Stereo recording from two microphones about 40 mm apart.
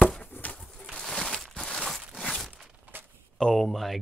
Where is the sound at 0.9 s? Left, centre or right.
Centre.